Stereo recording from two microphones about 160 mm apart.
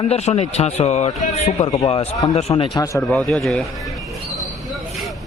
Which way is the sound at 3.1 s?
5° left (ahead or behind).